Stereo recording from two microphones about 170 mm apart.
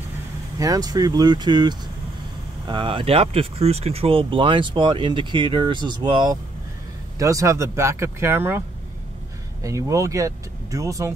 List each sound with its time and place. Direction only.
0.6 s speech: 20° right (ahead or behind)